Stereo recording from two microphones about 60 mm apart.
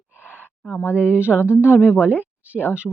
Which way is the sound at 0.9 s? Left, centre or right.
Right.